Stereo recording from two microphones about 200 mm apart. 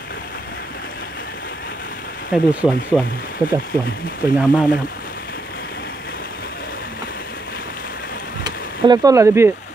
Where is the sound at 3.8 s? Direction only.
45° left (ahead or behind).